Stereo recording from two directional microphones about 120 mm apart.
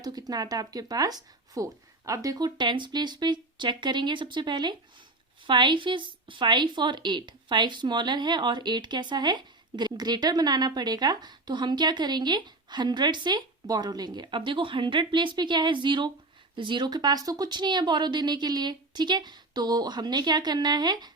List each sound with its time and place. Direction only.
0.0 s a woman's voice: 35° right (ahead or behind)